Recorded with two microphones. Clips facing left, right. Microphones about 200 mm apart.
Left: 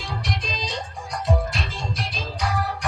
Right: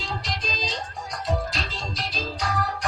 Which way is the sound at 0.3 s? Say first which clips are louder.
Left 2 dB; 60° left (ahead or behind).